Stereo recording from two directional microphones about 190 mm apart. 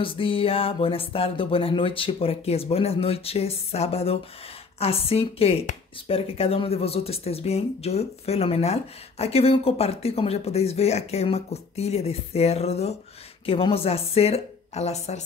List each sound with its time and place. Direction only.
0.0 s speech: 30° left (ahead or behind)